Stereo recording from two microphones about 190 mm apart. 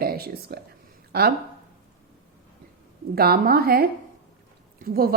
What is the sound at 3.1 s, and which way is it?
A woman's voice, 55° right (ahead or behind).